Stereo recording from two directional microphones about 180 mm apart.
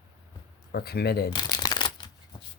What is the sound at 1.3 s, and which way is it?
Shuffling cards, 25° left (ahead or behind).